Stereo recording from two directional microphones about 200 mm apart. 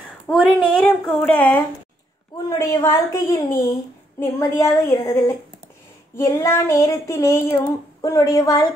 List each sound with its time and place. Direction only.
0.3 s a woman's voice: centre (ahead or behind)
2.6 s child singing: 15° left (ahead or behind)